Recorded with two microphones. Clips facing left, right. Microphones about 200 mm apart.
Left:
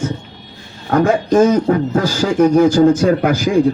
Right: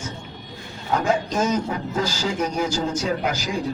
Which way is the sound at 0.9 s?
55° left (ahead or behind).